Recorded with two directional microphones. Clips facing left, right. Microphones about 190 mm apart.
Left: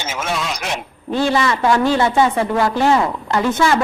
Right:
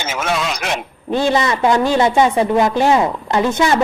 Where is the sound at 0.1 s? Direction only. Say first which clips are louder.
Right 3 dB; 75° right (ahead or behind).